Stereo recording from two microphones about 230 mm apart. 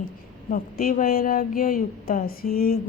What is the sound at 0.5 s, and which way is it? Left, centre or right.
A woman's voice, left.